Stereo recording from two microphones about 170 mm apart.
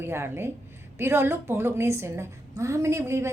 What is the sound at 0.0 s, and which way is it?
A woman's voice, 15° right (ahead or behind).